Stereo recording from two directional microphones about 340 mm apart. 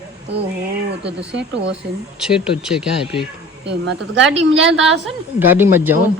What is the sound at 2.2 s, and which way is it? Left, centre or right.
Speech, centre.